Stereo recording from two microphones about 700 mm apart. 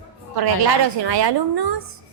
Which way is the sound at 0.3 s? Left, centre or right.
Right.